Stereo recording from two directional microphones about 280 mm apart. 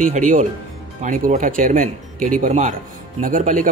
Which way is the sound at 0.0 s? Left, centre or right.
Right.